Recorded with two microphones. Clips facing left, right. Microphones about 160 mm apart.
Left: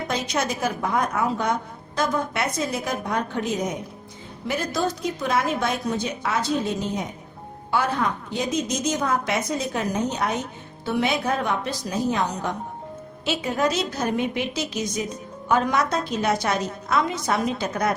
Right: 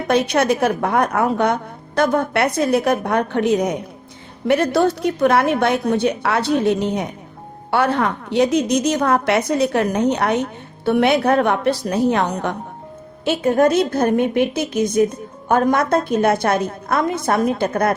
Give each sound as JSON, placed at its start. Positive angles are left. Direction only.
{"t": 0.1, "sound": "a woman's voice", "side_deg": -65}